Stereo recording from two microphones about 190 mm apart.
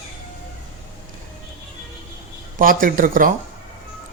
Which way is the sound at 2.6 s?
50° right (ahead or behind).